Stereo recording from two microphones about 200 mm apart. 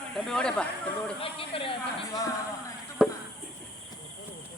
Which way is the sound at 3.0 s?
5° right (ahead or behind).